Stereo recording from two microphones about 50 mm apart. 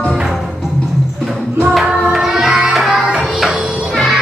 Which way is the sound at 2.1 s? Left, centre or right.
Centre.